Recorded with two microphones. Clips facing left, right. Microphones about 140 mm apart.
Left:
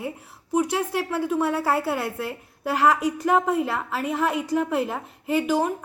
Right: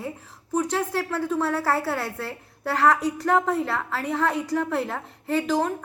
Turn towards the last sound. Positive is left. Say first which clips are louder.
# left 1 dB
turn(degrees=10)  # may be behind; listen again after turning